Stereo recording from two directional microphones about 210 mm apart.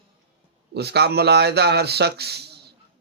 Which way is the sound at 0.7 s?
50° right (ahead or behind).